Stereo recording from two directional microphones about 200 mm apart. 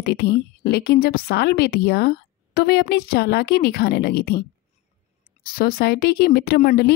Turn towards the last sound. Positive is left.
turn(degrees=55)  # may be behind; listen again after turning